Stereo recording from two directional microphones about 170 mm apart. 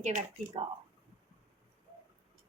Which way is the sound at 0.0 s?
45° right (ahead or behind).